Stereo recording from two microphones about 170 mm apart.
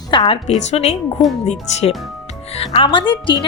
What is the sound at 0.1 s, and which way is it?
Speech, 30° left (ahead or behind).